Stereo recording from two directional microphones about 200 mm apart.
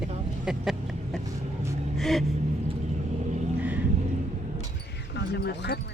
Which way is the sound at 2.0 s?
Centre (ahead or behind).